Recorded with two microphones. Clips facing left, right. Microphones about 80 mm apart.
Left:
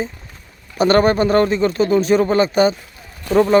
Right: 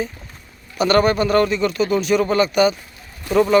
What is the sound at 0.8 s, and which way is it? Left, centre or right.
Speech, left.